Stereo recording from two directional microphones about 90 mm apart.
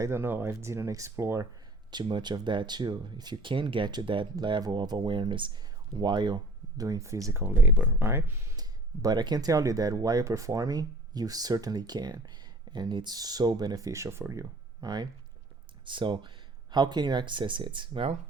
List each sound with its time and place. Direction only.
0.0 s speech: 25° right (ahead or behind)
1.9 s speech: 55° right (ahead or behind)
6.8 s speech: 35° right (ahead or behind)
7.4 s speech: 20° right (ahead or behind)
8.5 s speech: 45° right (ahead or behind); by 14.4 s 30° right (ahead or behind)
14.8 s speech: 45° right (ahead or behind)
15.9 s speech: 65° right (ahead or behind)
16.7 s speech: 50° right (ahead or behind); by 18.1 s 70° right (ahead or behind)